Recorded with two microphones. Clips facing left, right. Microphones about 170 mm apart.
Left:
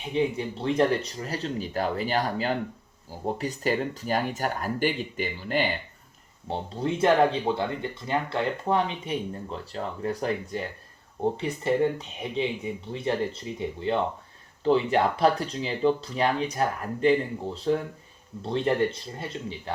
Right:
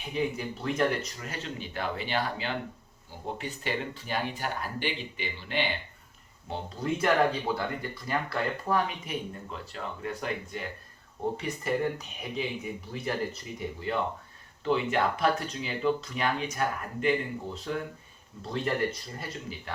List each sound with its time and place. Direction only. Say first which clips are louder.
0.0 s speech: left 5 dB; 30° left (ahead or behind); by 5.6 s 45° left (ahead or behind)
6.5 s speech: left 3 dB; 30° left (ahead or behind)